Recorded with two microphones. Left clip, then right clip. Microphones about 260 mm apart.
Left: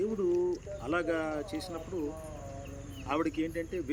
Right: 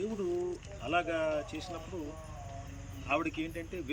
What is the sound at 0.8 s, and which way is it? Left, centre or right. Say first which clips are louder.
Speech: right 1 dB; centre.